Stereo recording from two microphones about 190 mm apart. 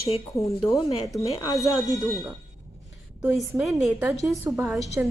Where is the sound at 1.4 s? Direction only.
20° left (ahead or behind).